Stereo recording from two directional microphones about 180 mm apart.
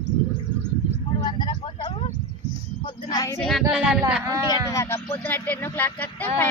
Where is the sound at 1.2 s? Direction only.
25° left (ahead or behind).